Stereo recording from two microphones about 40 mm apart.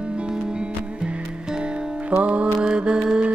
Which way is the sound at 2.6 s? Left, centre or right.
Right.